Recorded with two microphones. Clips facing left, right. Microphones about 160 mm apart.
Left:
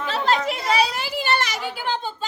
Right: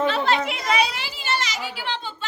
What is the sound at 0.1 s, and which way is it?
Children playing, 40° left (ahead or behind).